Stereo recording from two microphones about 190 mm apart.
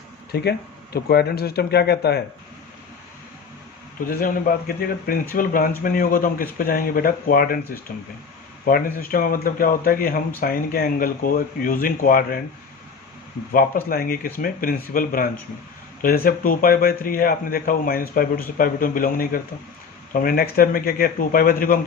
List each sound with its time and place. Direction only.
0.3 s speech: 55° left (ahead or behind)
4.1 s speech: 50° left (ahead or behind)
13.5 s speech: 50° left (ahead or behind)